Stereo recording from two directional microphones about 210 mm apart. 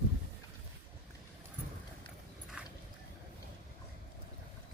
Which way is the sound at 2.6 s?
5° right (ahead or behind).